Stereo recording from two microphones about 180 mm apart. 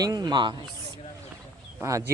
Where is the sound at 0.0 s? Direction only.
20° right (ahead or behind).